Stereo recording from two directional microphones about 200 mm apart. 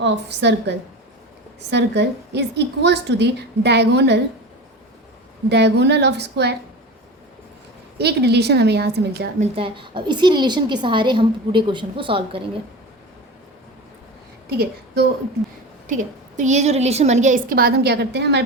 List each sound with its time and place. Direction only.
0.0 s a woman's voice: 60° right (ahead or behind)
5.5 s a woman's voice: 55° right (ahead or behind)
7.9 s a woman's voice: 55° right (ahead or behind)
9.4 s a woman's voice: 25° right (ahead or behind)
15.9 s a woman's voice: 40° right (ahead or behind); by 18.4 s 55° right (ahead or behind)